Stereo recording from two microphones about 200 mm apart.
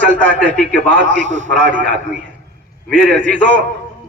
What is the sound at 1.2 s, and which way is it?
Speech, 70° right (ahead or behind).